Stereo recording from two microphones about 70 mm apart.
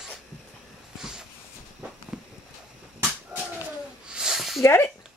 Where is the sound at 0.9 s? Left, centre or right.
Centre.